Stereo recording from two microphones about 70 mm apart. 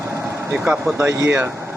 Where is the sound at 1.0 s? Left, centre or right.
Right.